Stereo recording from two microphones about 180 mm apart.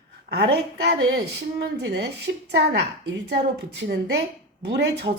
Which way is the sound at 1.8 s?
65° right (ahead or behind).